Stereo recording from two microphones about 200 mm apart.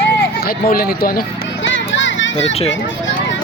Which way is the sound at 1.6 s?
65° left (ahead or behind).